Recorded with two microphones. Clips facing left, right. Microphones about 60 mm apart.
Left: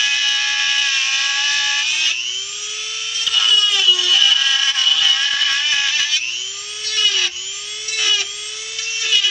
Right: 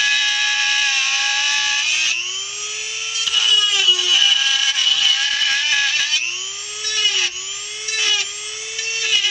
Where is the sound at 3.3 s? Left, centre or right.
Centre.